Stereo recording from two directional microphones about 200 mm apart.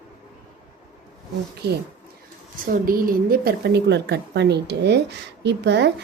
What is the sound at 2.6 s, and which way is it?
A woman's voice, 45° right (ahead or behind).